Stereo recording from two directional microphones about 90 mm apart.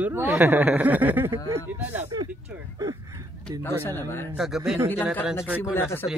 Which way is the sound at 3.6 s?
25° left (ahead or behind).